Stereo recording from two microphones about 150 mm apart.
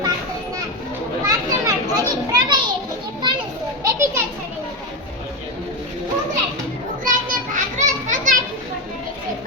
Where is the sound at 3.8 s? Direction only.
20° right (ahead or behind).